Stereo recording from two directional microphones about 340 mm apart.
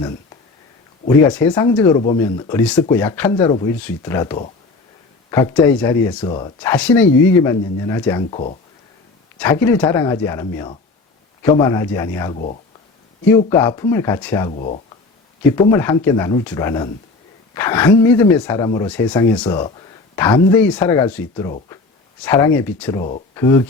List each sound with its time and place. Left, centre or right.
1.0 s speech: centre
9.4 s speech: centre
14.5 s speech: centre
15.7 s speech: centre